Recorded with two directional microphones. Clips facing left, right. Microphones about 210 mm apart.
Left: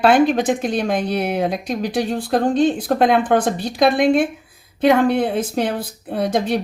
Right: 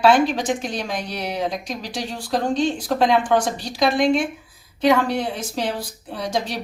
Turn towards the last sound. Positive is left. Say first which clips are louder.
# left 6 dB
turn(degrees=55)  # may be behind; listen again after turning